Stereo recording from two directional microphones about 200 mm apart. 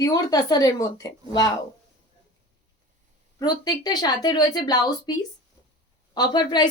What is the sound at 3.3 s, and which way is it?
A woman's voice, 20° left (ahead or behind).